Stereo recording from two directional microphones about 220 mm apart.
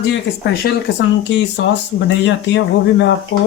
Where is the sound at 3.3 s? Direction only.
55° left (ahead or behind).